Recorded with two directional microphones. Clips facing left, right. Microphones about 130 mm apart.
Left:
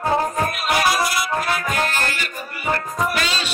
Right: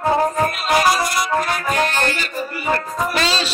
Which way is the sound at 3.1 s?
30° right (ahead or behind).